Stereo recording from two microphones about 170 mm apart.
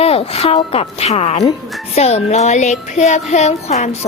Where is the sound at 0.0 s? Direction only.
35° left (ahead or behind).